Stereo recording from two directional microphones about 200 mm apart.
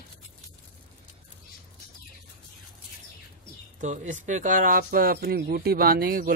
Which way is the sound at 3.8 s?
40° right (ahead or behind).